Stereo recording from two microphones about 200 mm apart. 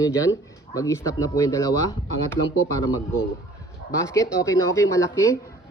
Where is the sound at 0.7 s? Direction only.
15° left (ahead or behind).